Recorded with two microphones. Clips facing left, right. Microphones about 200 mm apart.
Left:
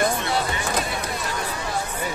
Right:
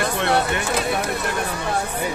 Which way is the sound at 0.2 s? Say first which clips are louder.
Right 5 dB; 65° right (ahead or behind).